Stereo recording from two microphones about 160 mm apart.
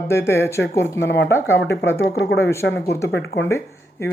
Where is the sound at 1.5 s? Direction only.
90° left.